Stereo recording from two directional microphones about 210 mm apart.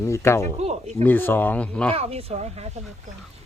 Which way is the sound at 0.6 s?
30° right (ahead or behind).